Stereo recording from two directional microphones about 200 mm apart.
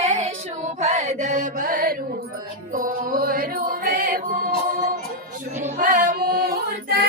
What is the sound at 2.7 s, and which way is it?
Music, 40° right (ahead or behind).